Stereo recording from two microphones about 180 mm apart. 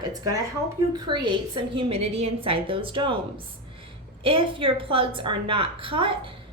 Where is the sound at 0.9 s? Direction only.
25° right (ahead or behind).